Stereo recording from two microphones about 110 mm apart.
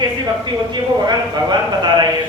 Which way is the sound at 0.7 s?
40° right (ahead or behind).